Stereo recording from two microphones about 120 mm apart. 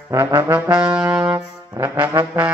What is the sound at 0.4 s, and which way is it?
Brass instrument, 10° right (ahead or behind).